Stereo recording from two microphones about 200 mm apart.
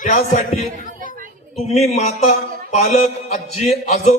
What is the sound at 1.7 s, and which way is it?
A man's voice, 35° left (ahead or behind).